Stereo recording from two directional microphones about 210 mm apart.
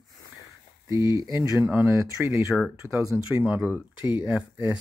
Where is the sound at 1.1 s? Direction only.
15° right (ahead or behind).